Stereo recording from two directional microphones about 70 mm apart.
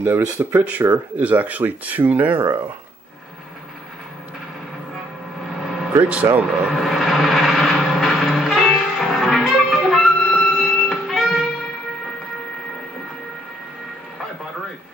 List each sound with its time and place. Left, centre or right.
0.0 s speech: right
5.5 s vehicle: centre
6.3 s speech: centre
6.8 s vehicle: centre